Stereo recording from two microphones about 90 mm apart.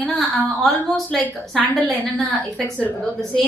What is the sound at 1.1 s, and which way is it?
Speech, 15° left (ahead or behind).